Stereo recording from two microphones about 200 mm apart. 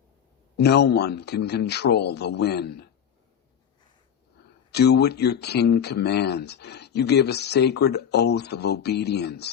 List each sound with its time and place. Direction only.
0.5 s speech: 55° left (ahead or behind)
4.7 s speech: 55° left (ahead or behind)